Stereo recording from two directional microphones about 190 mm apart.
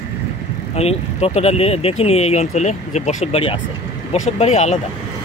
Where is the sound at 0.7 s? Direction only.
35° left (ahead or behind).